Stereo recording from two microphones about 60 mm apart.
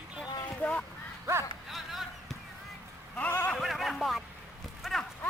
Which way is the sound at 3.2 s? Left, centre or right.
Left.